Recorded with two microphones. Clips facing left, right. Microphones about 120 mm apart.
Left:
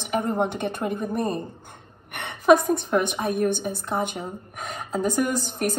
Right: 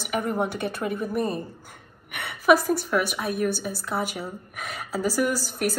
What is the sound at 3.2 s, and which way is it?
Speech, 50° left (ahead or behind).